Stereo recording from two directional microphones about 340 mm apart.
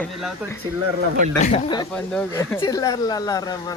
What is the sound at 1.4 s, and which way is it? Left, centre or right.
Speech, centre.